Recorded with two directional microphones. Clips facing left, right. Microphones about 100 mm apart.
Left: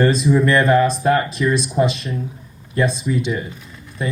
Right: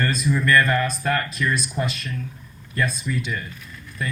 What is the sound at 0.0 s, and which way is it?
Speech, 30° left (ahead or behind).